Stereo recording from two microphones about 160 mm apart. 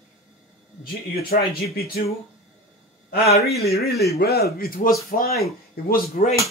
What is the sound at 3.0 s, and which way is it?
A man's voice, 75° left (ahead or behind).